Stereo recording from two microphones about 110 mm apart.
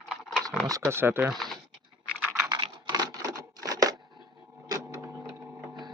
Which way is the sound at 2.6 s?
40° right (ahead or behind).